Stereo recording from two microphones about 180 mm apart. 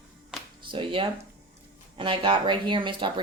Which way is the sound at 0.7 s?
30° right (ahead or behind).